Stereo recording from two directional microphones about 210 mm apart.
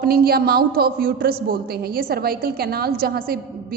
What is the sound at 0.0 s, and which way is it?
A man's voice, 45° right (ahead or behind).